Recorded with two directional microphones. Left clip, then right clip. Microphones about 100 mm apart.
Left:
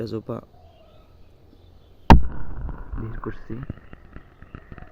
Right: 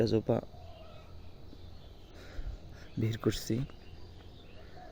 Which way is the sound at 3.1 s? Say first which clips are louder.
Right 2 dB; 30° right (ahead or behind).